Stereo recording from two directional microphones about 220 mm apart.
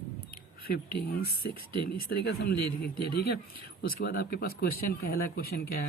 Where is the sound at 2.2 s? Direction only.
45° left (ahead or behind).